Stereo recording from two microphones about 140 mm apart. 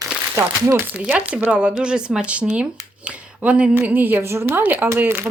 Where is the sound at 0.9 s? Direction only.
5° right (ahead or behind).